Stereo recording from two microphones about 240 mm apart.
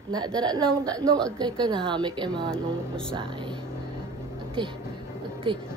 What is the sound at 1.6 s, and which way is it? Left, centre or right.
Speech, centre.